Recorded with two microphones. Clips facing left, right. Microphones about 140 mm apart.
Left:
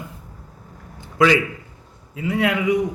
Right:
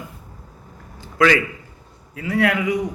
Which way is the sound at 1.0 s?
20° left (ahead or behind).